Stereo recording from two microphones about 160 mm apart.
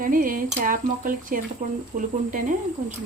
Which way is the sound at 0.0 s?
60° right (ahead or behind).